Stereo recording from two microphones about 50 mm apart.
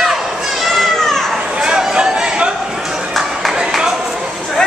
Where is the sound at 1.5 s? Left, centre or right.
Centre.